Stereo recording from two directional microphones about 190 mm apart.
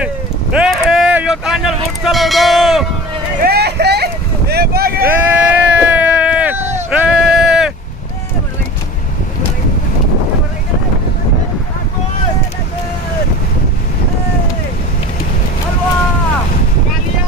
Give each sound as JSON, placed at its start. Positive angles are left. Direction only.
{"t": 0.0, "sound": "vehicle", "side_deg": -5}
{"t": 3.3, "sound": "vehicle", "side_deg": -55}
{"t": 5.0, "sound": "sheep", "side_deg": -10}